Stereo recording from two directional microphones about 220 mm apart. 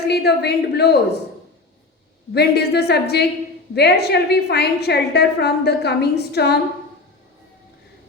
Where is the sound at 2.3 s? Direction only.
45° left (ahead or behind).